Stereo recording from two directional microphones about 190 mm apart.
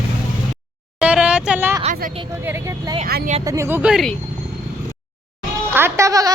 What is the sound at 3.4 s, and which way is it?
Speech, 15° right (ahead or behind).